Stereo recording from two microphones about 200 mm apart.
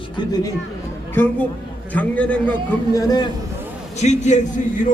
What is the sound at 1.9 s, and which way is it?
Speech, 5° left (ahead or behind).